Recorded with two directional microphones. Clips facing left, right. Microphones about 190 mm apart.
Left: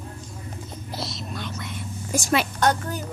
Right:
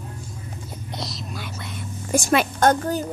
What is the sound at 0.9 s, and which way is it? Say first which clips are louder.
Whispering: even; centre (ahead or behind).